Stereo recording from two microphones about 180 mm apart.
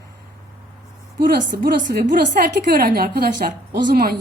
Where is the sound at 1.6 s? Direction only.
60° right (ahead or behind).